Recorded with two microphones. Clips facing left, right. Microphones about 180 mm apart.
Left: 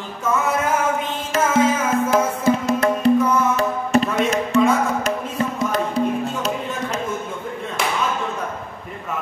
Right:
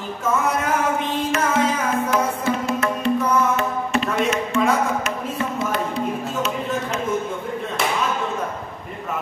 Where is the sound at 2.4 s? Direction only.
40° left (ahead or behind).